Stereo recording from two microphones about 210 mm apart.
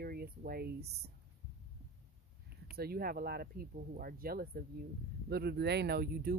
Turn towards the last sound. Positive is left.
turn(degrees=-45)  # may be behind; listen again after turning